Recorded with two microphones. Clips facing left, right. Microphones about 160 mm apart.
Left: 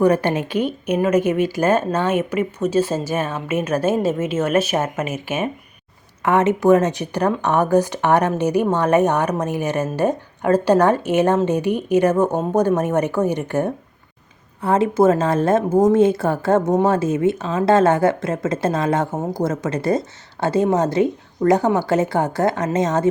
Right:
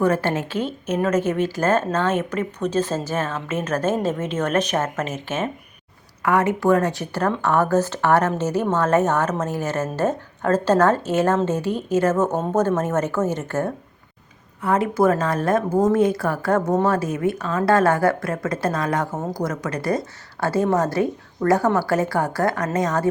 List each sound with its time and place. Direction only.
0.0 s a woman's voice: 15° left (ahead or behind)
6.2 s a woman's voice: 25° left (ahead or behind)
14.6 s speech: 25° left (ahead or behind)
19.1 s a woman's voice: 15° left (ahead or behind)
19.4 s speech: 25° left (ahead or behind)